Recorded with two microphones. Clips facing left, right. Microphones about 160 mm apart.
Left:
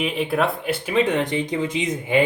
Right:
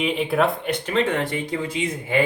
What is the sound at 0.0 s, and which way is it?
A man's voice, centre (ahead or behind).